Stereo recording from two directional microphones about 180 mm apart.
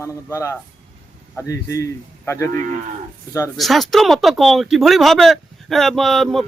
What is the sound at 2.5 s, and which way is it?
Speech, 45° right (ahead or behind).